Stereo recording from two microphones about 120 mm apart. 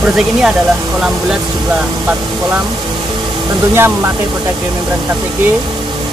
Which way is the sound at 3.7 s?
20° right (ahead or behind).